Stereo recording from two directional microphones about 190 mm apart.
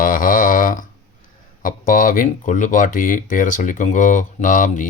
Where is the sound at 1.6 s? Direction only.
45° left (ahead or behind).